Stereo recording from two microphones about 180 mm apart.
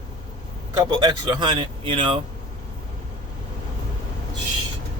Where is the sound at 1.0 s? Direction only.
25° right (ahead or behind).